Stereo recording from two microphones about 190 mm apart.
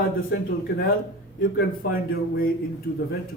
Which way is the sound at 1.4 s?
50° left (ahead or behind).